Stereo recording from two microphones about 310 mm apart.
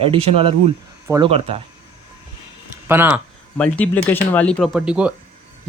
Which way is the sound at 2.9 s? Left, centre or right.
Centre.